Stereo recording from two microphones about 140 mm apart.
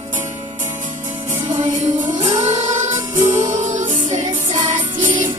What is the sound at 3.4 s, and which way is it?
Music, 65° right (ahead or behind).